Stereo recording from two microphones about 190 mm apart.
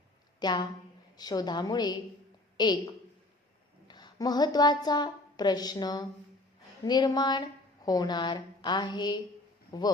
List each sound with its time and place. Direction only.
0.3 s a woman's voice: 25° left (ahead or behind)